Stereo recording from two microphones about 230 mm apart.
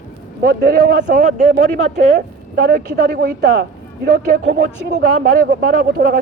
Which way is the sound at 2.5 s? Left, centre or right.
Right.